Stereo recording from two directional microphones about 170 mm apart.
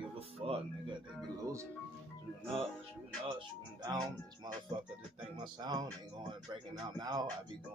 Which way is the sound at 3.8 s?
25° right (ahead or behind).